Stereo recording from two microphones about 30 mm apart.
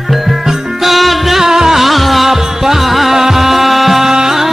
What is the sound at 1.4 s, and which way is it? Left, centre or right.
Music, centre.